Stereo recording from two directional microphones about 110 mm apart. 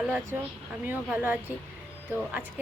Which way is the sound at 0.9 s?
15° right (ahead or behind).